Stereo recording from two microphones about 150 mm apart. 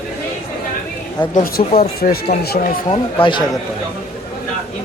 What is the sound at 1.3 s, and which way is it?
Speech, 75° left (ahead or behind).